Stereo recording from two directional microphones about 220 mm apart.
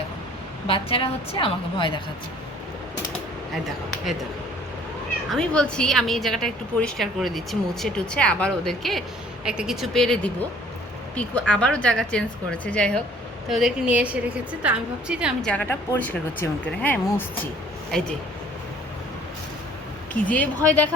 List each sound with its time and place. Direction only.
0.7 s a woman's voice: 25° left (ahead or behind)
5.3 s a woman's voice: 5° left (ahead or behind)
15.4 s speech: 10° left (ahead or behind)
20.2 s speech: 5° left (ahead or behind)